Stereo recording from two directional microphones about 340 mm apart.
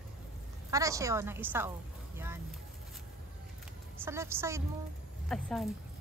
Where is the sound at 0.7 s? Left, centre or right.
Centre.